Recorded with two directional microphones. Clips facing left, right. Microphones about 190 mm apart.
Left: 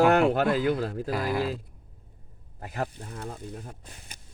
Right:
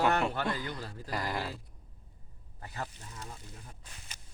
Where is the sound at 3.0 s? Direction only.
55° left (ahead or behind).